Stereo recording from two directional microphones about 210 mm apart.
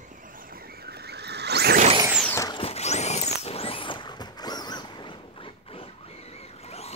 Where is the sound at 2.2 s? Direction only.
10° left (ahead or behind).